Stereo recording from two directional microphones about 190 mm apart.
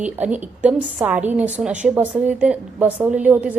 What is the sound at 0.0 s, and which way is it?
A woman's voice, 10° right (ahead or behind).